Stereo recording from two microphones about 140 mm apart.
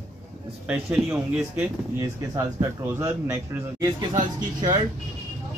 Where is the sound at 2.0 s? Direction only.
20° right (ahead or behind).